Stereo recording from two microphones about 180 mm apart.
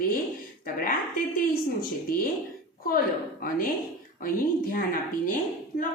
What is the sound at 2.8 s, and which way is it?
A woman's voice, 50° left (ahead or behind).